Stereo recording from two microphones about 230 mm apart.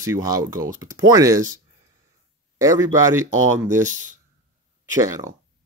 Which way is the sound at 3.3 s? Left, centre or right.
Right.